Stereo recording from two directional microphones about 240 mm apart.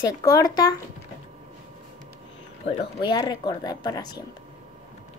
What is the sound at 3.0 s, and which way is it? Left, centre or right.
A woman's voice, centre.